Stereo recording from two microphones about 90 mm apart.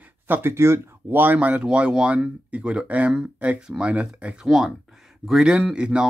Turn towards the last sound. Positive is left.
turn(degrees=-10)  # may be behind; listen again after turning